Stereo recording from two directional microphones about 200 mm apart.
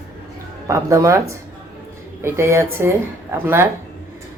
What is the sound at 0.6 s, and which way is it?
Speech, 15° right (ahead or behind).